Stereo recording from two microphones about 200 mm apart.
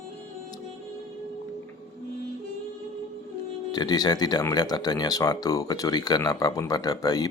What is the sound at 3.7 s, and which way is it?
Speech, 20° left (ahead or behind).